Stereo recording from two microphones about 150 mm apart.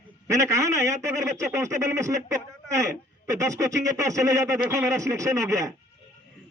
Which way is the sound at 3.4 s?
20° right (ahead or behind).